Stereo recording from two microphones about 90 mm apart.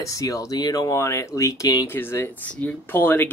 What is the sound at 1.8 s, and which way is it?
Speech, 25° left (ahead or behind).